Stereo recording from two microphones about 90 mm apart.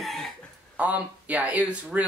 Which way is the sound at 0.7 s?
15° right (ahead or behind).